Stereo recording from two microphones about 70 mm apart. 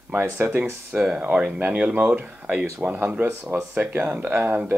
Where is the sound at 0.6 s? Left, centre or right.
Right.